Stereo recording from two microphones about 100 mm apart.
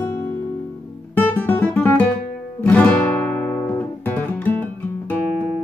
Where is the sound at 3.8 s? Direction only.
15° left (ahead or behind).